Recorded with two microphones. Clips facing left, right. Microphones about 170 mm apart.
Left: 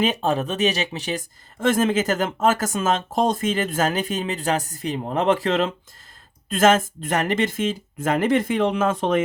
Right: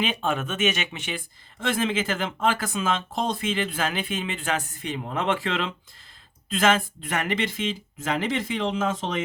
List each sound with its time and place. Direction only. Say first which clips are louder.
0.0 s speech: left 5 dB; 40° left (ahead or behind); by 9.2 s 55° left (ahead or behind)